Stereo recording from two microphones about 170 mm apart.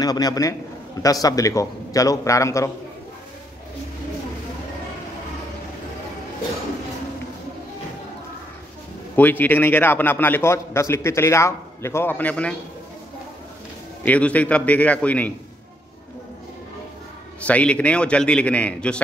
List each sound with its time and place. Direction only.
0.0 s a man's voice: 20° left (ahead or behind)
9.1 s a man's voice: 10° left (ahead or behind)
14.0 s a man's voice: 10° left (ahead or behind)
17.4 s a man's voice: 10° left (ahead or behind)